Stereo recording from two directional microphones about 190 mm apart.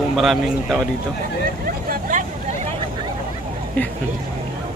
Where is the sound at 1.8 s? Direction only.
45° right (ahead or behind).